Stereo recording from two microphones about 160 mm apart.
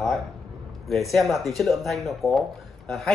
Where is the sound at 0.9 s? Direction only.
Centre (ahead or behind).